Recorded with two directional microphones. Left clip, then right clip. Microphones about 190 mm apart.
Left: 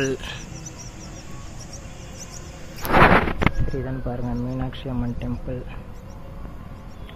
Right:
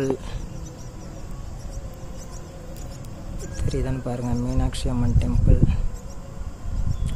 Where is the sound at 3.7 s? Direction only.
20° right (ahead or behind).